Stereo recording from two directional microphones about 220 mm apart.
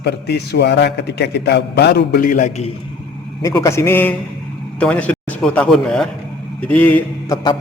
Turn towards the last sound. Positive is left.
turn(degrees=15)  # may be behind; listen again after turning